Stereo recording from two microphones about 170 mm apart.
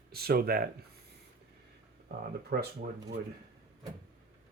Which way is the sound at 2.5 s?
60° right (ahead or behind).